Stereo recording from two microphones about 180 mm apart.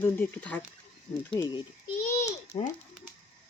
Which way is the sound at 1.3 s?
25° left (ahead or behind).